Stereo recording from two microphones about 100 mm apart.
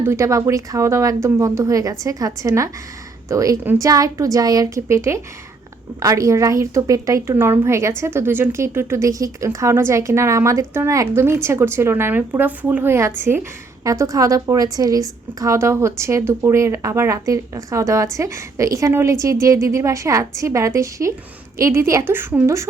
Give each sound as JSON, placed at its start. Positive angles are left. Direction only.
{"t": 0.0, "sound": "a woman's voice", "side_deg": -30}
{"t": 13.8, "sound": "a woman's voice", "side_deg": -30}